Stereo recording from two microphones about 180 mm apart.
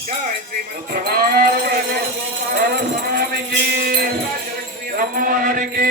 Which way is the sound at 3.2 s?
60° right (ahead or behind).